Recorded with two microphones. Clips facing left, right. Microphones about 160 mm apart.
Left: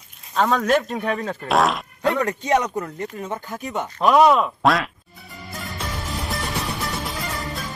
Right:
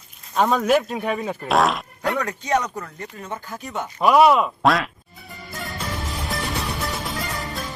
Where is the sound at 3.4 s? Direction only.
Centre (ahead or behind).